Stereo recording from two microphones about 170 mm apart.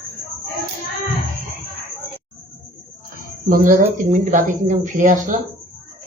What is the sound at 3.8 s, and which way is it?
Speech, 50° right (ahead or behind).